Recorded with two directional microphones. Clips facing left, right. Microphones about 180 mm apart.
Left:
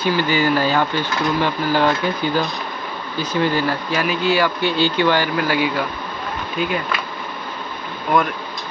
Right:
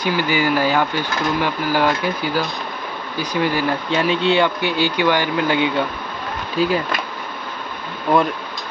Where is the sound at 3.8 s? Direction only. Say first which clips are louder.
Right 2 dB; 25° right (ahead or behind).